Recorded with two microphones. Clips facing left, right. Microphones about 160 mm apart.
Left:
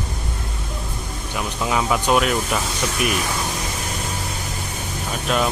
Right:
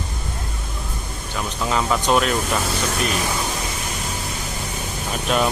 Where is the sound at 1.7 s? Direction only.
10° left (ahead or behind).